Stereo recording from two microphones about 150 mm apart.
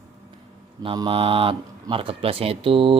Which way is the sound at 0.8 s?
35° right (ahead or behind).